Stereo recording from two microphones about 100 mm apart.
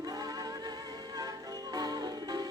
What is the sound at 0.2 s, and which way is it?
Music, 40° right (ahead or behind).